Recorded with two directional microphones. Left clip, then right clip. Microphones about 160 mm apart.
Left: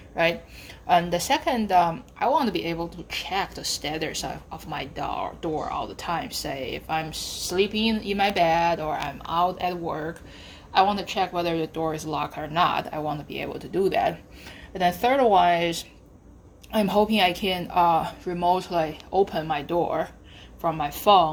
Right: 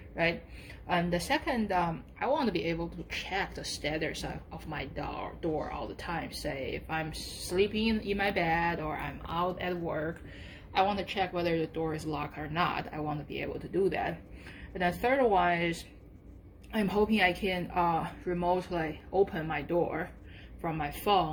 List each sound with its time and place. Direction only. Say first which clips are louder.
0.9 s a woman's voice: left 9 dB; 55° left (ahead or behind)